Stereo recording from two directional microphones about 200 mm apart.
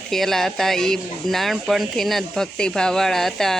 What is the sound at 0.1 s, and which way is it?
Speech, centre (ahead or behind).